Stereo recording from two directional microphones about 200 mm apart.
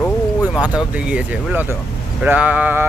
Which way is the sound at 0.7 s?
5° right (ahead or behind).